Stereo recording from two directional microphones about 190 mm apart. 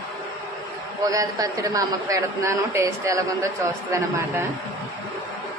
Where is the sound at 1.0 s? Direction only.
20° right (ahead or behind).